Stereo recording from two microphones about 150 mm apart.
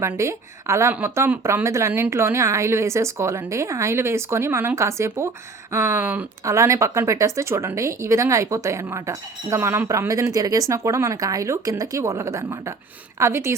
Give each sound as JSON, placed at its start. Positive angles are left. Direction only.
{"t": 0.0, "sound": "a woman's voice", "side_deg": -20}